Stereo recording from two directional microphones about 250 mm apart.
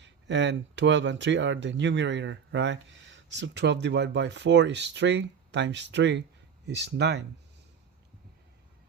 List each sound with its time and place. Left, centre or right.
0.0 s speech: right